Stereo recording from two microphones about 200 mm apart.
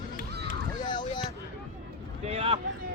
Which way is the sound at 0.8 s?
20° left (ahead or behind).